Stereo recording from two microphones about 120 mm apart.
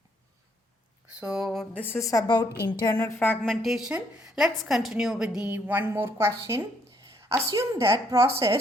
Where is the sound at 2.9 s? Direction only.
20° left (ahead or behind).